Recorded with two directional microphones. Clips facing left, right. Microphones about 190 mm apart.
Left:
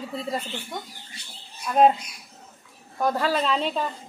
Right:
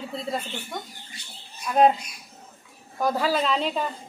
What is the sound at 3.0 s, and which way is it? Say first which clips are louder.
Speech: even; centre (ahead or behind).